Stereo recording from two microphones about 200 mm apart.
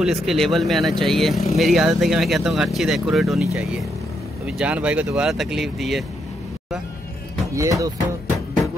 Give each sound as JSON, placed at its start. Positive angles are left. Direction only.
{"t": 0.0, "sound": "speech", "side_deg": 0}
{"t": 7.5, "sound": "speech", "side_deg": -15}